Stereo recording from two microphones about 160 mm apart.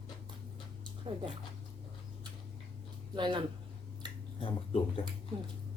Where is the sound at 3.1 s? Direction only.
30° right (ahead or behind).